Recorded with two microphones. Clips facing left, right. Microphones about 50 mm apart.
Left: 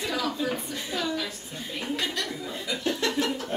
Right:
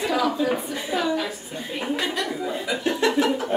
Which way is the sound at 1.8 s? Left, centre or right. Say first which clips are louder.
Right 5 dB; centre.